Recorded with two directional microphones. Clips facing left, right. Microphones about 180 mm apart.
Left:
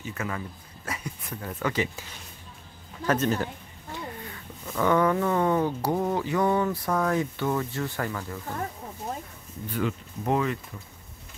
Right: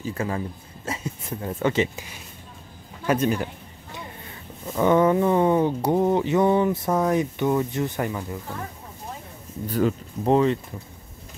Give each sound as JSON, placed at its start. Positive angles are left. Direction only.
{"t": 0.0, "sound": "speech", "side_deg": -30}
{"t": 3.1, "sound": "speech", "side_deg": -15}
{"t": 9.7, "sound": "speech", "side_deg": -40}